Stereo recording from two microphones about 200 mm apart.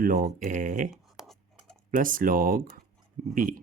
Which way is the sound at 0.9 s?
Centre (ahead or behind).